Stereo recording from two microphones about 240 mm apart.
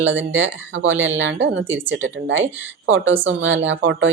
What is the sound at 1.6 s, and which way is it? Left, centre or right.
Speech, centre.